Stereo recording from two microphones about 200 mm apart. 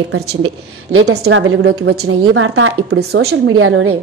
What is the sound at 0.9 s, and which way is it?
Speech, 55° right (ahead or behind).